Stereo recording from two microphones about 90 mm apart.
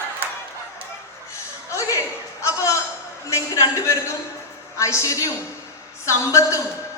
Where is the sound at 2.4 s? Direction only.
35° left (ahead or behind).